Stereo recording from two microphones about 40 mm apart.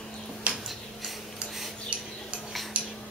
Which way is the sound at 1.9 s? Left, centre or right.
Right.